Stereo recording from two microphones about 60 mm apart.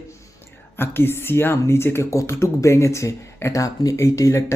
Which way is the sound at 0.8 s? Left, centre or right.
Left.